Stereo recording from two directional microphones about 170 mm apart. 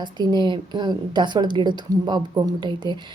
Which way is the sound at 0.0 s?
25° right (ahead or behind).